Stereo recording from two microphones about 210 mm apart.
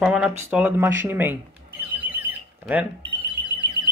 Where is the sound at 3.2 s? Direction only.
25° right (ahead or behind).